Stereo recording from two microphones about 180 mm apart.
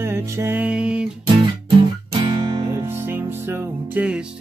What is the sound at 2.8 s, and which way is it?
Music, 10° right (ahead or behind).